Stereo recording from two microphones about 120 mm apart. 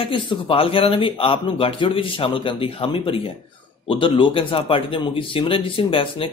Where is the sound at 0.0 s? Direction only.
45° left (ahead or behind).